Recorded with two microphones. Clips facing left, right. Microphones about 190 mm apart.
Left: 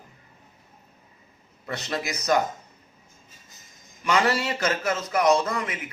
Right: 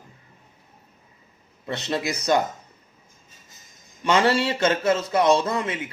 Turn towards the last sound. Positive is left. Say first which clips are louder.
# right 2 dB
turn(degrees=-30)  # may be behind; listen again after turning